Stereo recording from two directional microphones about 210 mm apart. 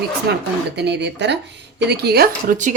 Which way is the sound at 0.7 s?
55° right (ahead or behind).